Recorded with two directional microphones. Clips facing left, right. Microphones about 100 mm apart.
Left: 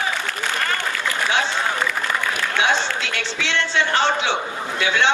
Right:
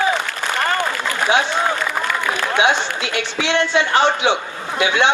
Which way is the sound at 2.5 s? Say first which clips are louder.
Right 3 dB; 15° right (ahead or behind).